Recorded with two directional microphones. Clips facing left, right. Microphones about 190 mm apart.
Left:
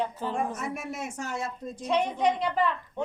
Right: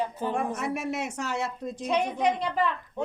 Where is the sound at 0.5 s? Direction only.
75° right (ahead or behind).